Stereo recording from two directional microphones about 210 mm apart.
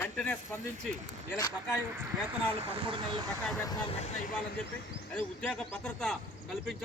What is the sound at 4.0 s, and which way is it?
Speech, 35° left (ahead or behind).